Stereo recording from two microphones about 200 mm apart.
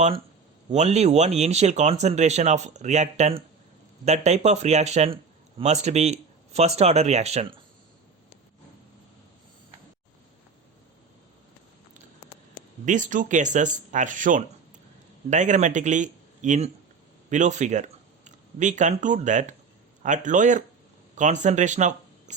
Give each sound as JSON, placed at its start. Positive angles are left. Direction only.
{"t": 0.7, "sound": "speech", "side_deg": -35}
{"t": 12.8, "sound": "speech", "side_deg": -40}